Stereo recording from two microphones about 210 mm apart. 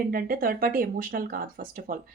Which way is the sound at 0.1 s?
45° right (ahead or behind).